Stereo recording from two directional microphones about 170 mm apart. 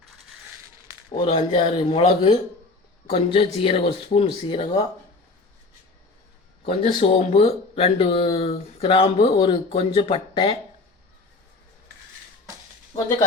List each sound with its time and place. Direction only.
1.2 s speech: 35° left (ahead or behind)
6.7 s speech: 40° left (ahead or behind)